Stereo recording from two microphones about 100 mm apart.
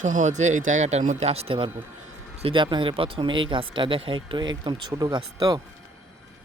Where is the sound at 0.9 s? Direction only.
90° right; by 1.7 s 70° right (ahead or behind).